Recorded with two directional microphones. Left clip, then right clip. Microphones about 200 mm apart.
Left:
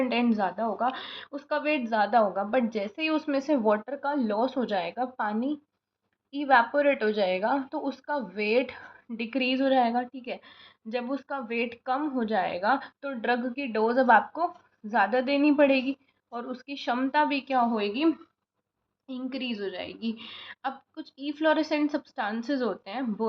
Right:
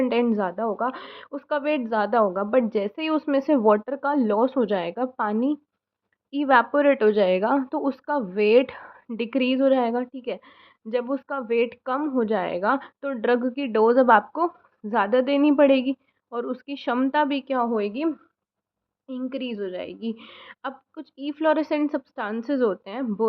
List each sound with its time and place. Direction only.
0.0 s a woman's voice: 40° right (ahead or behind)